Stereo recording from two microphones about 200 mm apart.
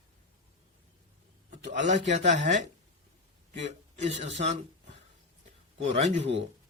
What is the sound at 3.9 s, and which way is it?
A woman's voice, 35° right (ahead or behind).